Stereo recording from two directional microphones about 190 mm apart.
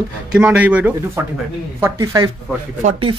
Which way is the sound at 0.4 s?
5° right (ahead or behind).